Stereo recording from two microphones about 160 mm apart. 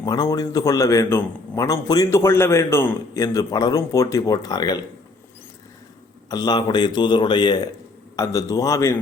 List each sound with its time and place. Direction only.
0.0 s a man's voice: 25° left (ahead or behind)
6.3 s a man's voice: 25° left (ahead or behind)